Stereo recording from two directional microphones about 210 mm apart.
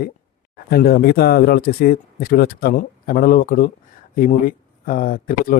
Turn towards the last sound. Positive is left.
turn(degrees=40)  # may be behind; listen again after turning